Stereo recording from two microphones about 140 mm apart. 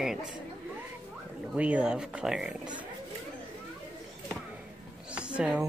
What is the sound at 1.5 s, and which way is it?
Speech, 10° right (ahead or behind).